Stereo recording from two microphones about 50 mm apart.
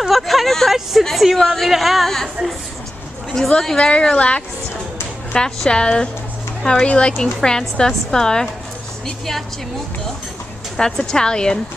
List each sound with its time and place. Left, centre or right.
0.0 s a sound: centre
1.1 s speech: centre
3.3 s a woman's voice: centre
10.8 s a woman's voice: centre